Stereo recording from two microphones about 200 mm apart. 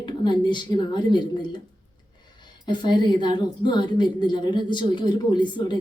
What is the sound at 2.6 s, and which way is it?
A woman's voice, 20° left (ahead or behind).